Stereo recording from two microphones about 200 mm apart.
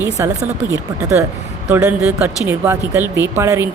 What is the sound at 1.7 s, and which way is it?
Speech, 10° right (ahead or behind).